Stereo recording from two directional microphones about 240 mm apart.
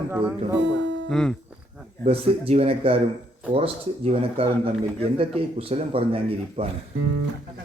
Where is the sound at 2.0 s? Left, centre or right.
Right.